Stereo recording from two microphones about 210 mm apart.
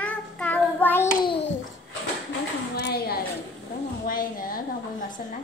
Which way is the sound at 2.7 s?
45° left (ahead or behind).